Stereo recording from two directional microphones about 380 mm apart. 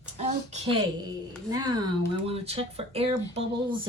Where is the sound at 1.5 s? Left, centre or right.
Centre.